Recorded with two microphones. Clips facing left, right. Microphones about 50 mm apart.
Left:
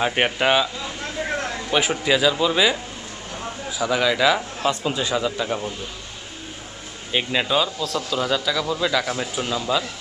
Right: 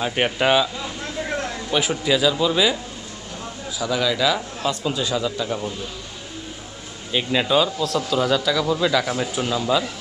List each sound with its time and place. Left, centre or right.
0.0 s a sound: centre
1.9 s a man's voice: centre
7.1 s a man's voice: centre